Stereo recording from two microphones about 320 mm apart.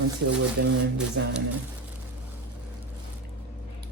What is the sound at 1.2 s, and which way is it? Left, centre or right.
Speech, right.